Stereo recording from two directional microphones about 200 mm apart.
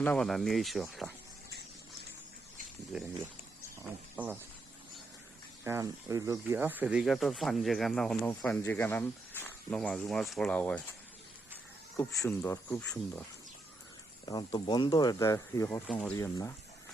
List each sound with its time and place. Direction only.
0.0 s speech: 5° left (ahead or behind)
1.5 s a sound: 55° right (ahead or behind)
2.9 s speech: centre (ahead or behind)
5.6 s speech: 15° right (ahead or behind); by 10.8 s 5° left (ahead or behind)
11.9 s speech: 10° left (ahead or behind)
14.3 s speech: 20° left (ahead or behind)
15.9 s speech: 5° left (ahead or behind)
16.1 s speech: 15° left (ahead or behind)